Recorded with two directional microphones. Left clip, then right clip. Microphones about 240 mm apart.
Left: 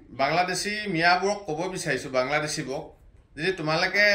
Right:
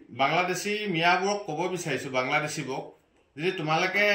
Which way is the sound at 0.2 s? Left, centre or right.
Centre.